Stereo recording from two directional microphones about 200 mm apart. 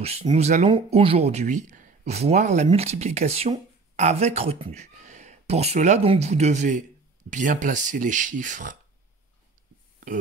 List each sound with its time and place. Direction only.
0.0 s speech: 30° right (ahead or behind)